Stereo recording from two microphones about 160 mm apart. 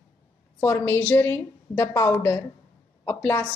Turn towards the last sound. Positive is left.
turn(degrees=15)  # may be behind; listen again after turning